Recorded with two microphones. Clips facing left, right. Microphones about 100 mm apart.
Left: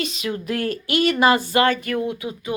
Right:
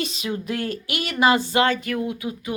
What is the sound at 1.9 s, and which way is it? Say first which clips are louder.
Speech: left 2 dB; 5° right (ahead or behind).